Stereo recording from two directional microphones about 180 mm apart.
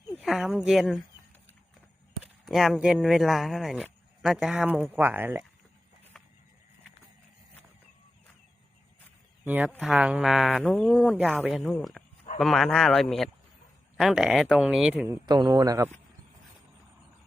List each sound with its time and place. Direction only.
0.2 s speech: 5° right (ahead or behind)
2.2 s speech: centre (ahead or behind)
9.4 s speech: 10° right (ahead or behind)